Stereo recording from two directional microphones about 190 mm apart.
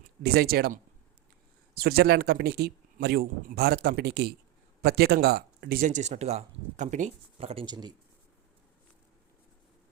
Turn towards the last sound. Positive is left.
turn(degrees=-20)  # may be behind; listen again after turning